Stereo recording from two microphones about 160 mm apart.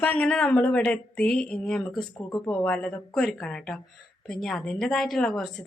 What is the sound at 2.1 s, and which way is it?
Speech, 20° left (ahead or behind).